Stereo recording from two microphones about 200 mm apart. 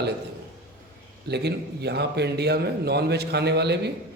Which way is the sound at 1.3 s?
55° right (ahead or behind).